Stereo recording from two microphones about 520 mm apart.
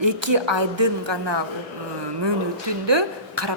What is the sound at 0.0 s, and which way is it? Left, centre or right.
Speech, right.